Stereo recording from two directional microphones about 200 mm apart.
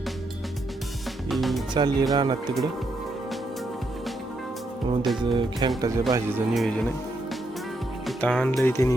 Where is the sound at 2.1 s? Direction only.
20° right (ahead or behind).